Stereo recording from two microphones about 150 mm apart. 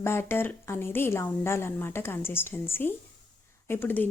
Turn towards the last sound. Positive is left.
turn(degrees=15)  # may be behind; listen again after turning